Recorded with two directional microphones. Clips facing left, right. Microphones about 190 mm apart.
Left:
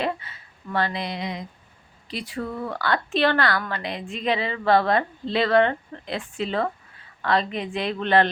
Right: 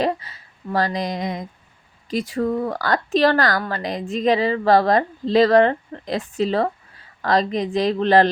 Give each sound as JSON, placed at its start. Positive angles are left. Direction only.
{"t": 0.0, "sound": "a woman's voice", "side_deg": -40}